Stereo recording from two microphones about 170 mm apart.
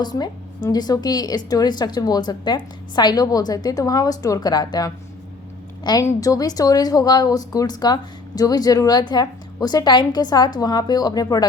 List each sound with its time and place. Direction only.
0.0 s a woman's voice: 25° left (ahead or behind)